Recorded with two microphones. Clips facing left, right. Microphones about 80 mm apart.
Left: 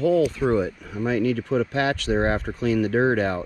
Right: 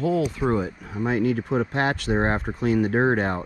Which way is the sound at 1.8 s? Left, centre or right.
Right.